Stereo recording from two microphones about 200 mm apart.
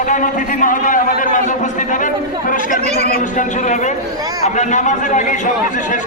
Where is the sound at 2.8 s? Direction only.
35° right (ahead or behind).